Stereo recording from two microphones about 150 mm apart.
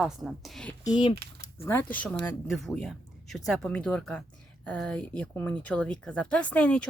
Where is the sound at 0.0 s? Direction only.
Centre (ahead or behind).